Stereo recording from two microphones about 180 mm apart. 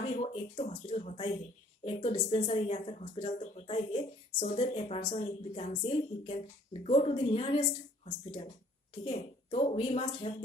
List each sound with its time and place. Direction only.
0.2 s speech: 35° left (ahead or behind)
9.0 s speech: 30° left (ahead or behind)